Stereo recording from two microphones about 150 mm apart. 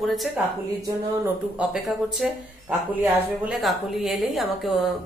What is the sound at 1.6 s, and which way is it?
A woman's voice, centre (ahead or behind).